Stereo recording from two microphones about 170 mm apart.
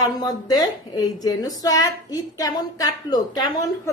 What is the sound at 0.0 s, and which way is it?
A woman's voice, 20° left (ahead or behind).